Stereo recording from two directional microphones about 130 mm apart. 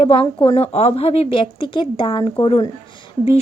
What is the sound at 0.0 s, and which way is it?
A woman's voice, 45° left (ahead or behind).